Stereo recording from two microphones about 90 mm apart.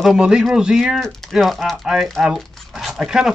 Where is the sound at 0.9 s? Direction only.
5° left (ahead or behind).